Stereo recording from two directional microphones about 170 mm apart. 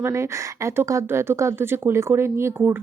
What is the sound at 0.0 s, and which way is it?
Speech, 15° right (ahead or behind).